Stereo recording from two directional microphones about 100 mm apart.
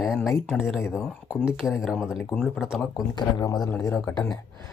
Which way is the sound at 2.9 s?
40° left (ahead or behind).